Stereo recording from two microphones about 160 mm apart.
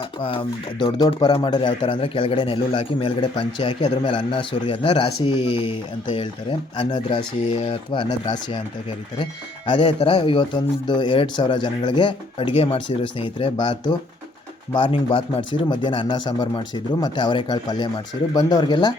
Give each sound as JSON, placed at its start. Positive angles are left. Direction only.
{"t": 0.0, "sound": "speech", "side_deg": 35}
{"t": 9.6, "sound": "speech", "side_deg": 30}